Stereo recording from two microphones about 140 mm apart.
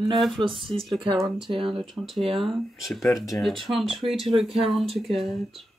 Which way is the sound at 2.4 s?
Centre (ahead or behind).